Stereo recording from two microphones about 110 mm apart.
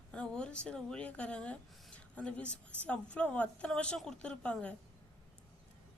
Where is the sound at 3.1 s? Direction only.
10° left (ahead or behind).